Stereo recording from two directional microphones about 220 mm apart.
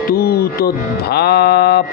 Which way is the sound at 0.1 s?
45° left (ahead or behind).